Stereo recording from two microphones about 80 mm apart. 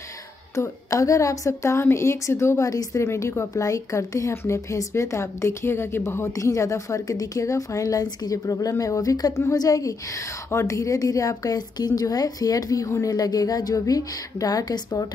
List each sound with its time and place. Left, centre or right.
0.6 s a woman's voice: left